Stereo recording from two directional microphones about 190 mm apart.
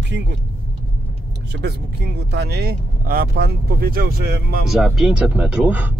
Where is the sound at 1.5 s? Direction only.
60° right (ahead or behind).